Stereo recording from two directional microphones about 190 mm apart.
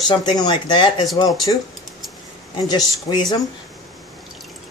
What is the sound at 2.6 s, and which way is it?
Speech, 20° left (ahead or behind).